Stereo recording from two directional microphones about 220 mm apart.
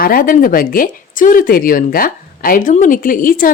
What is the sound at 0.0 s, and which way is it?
Speech, 40° left (ahead or behind).